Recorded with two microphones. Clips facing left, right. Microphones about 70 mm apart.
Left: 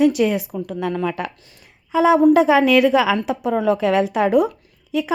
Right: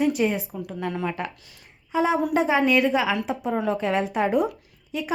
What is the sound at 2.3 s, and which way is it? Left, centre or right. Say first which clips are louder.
A woman's voice: left 7 dB; left.